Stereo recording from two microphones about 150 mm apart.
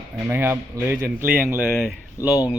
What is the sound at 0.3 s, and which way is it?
Speech, 15° right (ahead or behind).